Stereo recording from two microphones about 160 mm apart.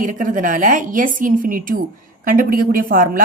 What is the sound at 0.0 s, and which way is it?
A woman's voice, 55° right (ahead or behind).